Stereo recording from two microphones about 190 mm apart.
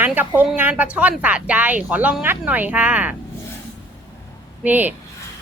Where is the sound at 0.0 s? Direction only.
10° right (ahead or behind).